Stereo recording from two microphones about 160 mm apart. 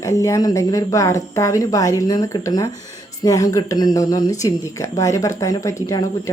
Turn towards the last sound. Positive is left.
turn(degrees=20)  # may be behind; listen again after turning